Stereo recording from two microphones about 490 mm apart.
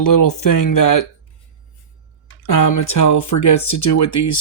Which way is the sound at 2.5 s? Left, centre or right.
Left.